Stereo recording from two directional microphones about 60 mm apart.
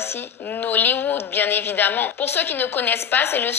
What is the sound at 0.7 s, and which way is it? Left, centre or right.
A woman's voice, left.